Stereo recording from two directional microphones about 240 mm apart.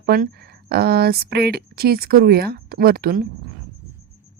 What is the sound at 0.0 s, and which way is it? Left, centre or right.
Speech, right.